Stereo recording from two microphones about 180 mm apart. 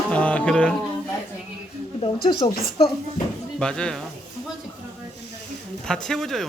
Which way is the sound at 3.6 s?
5° left (ahead or behind).